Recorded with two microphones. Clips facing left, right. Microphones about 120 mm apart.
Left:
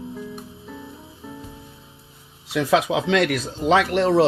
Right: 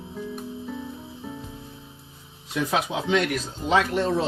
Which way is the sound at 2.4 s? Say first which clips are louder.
Left 6 dB; 90° left.